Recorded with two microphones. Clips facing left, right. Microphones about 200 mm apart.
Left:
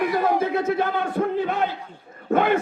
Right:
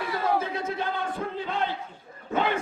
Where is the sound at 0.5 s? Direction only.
60° left (ahead or behind).